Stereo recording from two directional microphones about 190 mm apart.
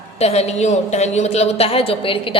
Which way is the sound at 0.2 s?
35° left (ahead or behind).